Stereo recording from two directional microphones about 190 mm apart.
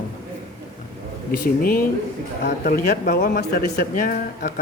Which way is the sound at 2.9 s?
45° left (ahead or behind).